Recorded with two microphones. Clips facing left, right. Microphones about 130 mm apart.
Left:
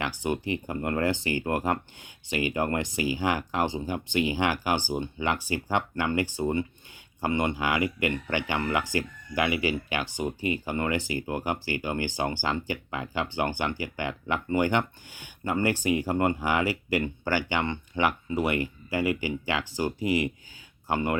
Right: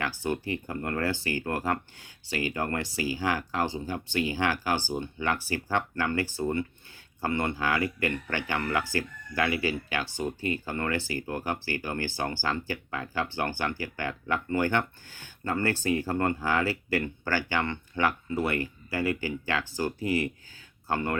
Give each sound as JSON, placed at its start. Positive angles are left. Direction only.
{"t": 0.2, "sound": "speech", "side_deg": 20}